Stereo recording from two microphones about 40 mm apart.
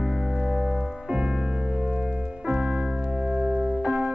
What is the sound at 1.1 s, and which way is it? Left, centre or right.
Music, centre.